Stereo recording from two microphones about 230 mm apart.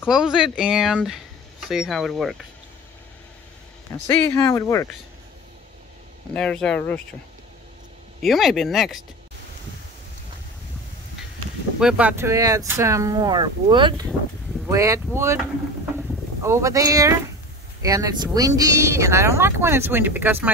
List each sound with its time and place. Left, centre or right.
0.1 s speech: centre
4.1 s speech: centre
6.3 s speech: centre
8.2 s speech: centre
11.8 s speech: centre
16.4 s speech: centre